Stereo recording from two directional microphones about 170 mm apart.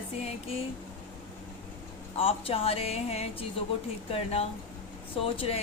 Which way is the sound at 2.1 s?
35° left (ahead or behind).